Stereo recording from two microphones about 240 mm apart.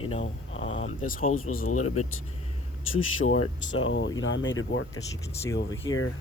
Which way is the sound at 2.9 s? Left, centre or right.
Left.